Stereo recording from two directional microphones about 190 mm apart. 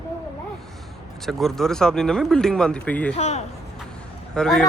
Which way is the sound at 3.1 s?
35° left (ahead or behind).